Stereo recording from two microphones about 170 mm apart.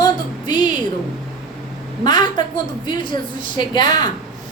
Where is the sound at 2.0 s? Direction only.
25° left (ahead or behind).